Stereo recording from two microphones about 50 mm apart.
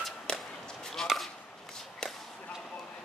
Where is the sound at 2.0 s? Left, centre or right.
Centre.